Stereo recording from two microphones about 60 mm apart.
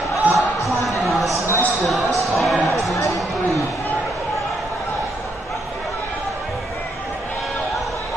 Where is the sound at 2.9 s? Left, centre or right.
Left.